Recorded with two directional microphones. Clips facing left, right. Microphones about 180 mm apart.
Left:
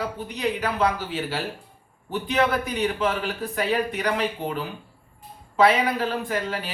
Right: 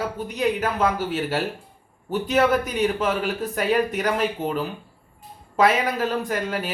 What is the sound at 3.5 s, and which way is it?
Speech, 45° right (ahead or behind).